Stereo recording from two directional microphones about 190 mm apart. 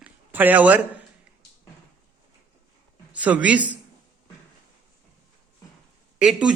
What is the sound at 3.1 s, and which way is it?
Speech, 10° right (ahead or behind).